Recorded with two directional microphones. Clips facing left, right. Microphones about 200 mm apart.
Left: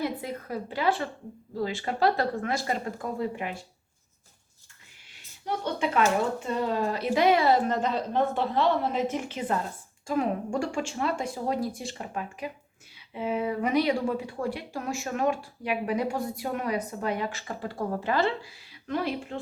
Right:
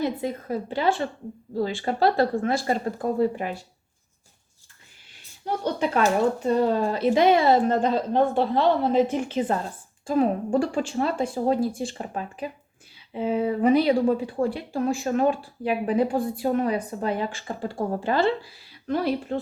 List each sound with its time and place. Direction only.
0.0 s a woman's voice: 25° right (ahead or behind)
5.5 s speech: 40° right (ahead or behind)